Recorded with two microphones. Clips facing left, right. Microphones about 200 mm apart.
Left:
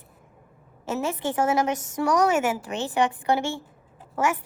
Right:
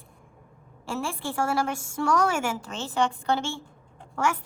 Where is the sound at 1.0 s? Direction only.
20° left (ahead or behind).